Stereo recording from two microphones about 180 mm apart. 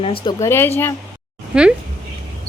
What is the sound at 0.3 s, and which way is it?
Speech, 15° left (ahead or behind).